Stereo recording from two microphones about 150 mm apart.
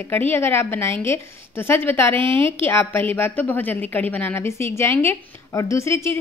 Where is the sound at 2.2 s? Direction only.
35° right (ahead or behind).